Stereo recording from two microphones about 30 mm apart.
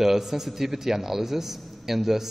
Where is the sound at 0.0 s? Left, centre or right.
Centre.